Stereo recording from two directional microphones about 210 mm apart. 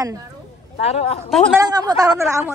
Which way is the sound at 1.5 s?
20° right (ahead or behind).